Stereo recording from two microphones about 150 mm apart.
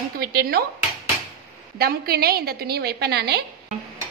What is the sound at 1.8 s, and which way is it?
A woman's voice, 90° right.